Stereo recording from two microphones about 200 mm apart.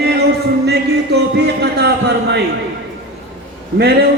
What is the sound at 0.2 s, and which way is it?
Music, 55° right (ahead or behind).